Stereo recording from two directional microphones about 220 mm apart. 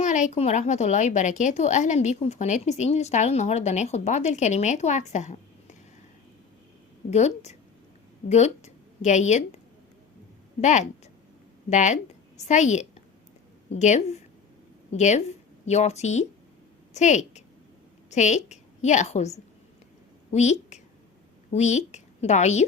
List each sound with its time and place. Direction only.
0.0 s a woman's voice: 35° left (ahead or behind)
7.1 s a woman's voice: 30° left (ahead or behind)
10.6 s a woman's voice: 35° left (ahead or behind)